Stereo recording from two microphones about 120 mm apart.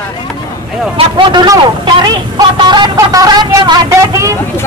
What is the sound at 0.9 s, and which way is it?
A man's voice, 40° right (ahead or behind).